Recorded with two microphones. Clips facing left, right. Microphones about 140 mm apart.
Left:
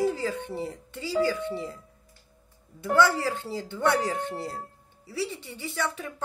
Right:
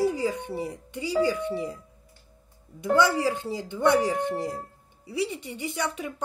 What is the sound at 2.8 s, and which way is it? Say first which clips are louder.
Speech: right 1 dB; 15° right (ahead or behind).